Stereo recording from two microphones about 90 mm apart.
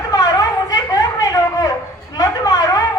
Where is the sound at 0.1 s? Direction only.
50° left (ahead or behind).